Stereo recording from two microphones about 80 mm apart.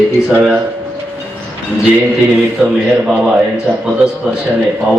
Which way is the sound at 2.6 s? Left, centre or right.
Centre.